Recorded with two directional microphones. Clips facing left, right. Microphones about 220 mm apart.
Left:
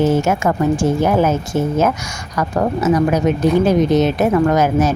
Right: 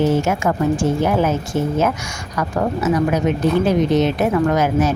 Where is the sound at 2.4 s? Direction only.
40° left (ahead or behind).